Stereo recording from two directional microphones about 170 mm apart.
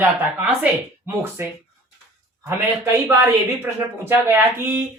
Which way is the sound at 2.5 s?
15° right (ahead or behind).